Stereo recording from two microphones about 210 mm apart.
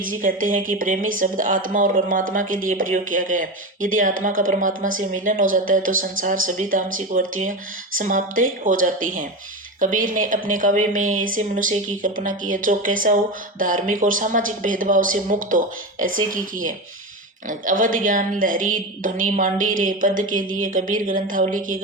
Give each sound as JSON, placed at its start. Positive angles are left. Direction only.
{"t": 0.2, "sound": "a woman's voice", "side_deg": -40}